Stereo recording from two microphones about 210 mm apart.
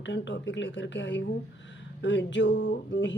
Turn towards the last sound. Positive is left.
turn(degrees=60)  # may be behind; listen again after turning